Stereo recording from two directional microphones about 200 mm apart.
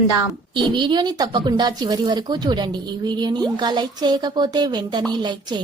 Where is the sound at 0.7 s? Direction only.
20° right (ahead or behind).